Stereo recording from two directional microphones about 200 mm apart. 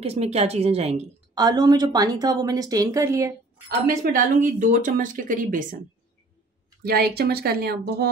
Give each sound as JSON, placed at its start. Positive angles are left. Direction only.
{"t": 0.0, "sound": "speech", "side_deg": -30}
{"t": 1.3, "sound": "speech", "side_deg": -20}
{"t": 4.0, "sound": "speech", "side_deg": -40}
{"t": 6.8, "sound": "speech", "side_deg": -50}